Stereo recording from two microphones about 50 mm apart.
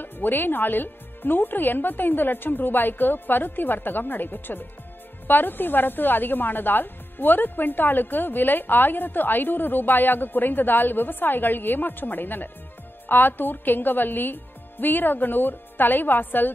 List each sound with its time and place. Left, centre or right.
0.0 s a woman's voice: left